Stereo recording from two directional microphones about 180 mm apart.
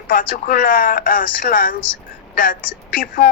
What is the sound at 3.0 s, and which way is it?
Speech, 50° left (ahead or behind).